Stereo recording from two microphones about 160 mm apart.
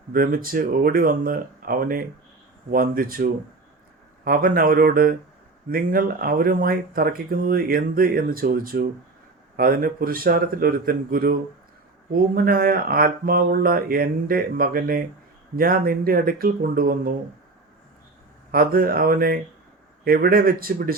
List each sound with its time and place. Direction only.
0.1 s speech: 65° right (ahead or behind)
18.5 s speech: 65° right (ahead or behind)